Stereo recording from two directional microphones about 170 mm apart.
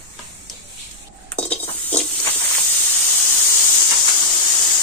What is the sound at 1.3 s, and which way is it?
Stir, 10° left (ahead or behind).